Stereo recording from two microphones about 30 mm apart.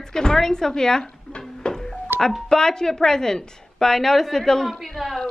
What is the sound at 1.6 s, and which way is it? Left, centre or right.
Music, left.